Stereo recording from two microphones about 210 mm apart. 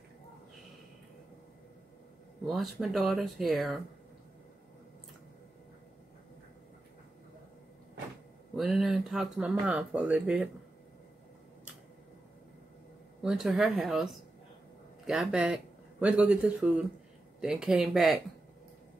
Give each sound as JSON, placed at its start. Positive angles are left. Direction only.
{"t": 2.4, "sound": "speech", "side_deg": 0}
{"t": 8.5, "sound": "speech", "side_deg": 0}
{"t": 13.2, "sound": "speech", "side_deg": 0}